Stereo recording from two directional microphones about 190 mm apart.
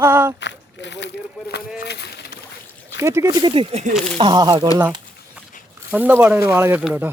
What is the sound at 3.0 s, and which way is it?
Speech, 15° right (ahead or behind).